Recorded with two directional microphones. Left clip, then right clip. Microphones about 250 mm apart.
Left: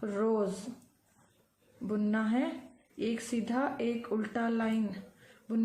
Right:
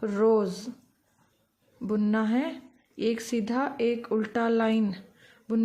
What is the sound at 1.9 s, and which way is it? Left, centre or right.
A woman's voice, right.